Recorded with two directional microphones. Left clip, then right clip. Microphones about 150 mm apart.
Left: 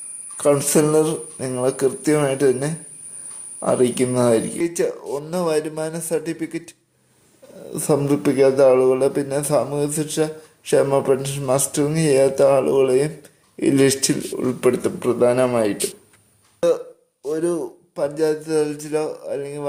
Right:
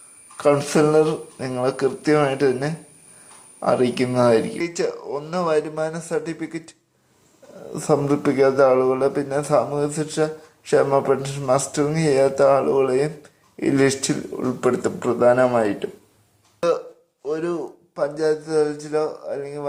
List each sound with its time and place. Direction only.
0.3 s a man's voice: 20° left (ahead or behind)
17.3 s a man's voice: 30° left (ahead or behind)